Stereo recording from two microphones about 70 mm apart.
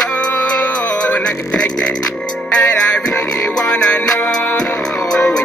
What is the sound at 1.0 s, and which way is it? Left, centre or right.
Music, centre.